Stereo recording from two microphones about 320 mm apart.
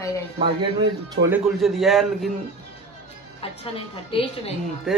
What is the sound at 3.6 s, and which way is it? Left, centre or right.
Speech, centre.